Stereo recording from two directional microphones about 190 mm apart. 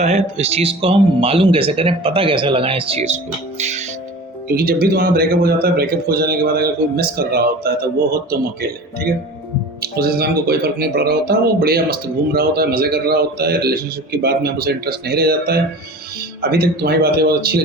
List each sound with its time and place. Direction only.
0.0 s speech: 35° right (ahead or behind)
3.6 s music: 35° right (ahead or behind)
4.5 s a man's voice: 50° right (ahead or behind)
9.8 s speech: 55° right (ahead or behind)